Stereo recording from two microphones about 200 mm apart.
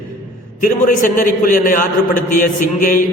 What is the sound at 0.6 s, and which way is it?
A man's voice, 40° left (ahead or behind).